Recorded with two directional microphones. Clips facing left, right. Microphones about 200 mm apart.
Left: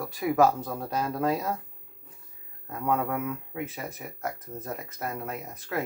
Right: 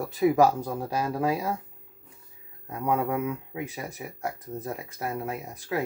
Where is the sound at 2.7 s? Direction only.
15° right (ahead or behind).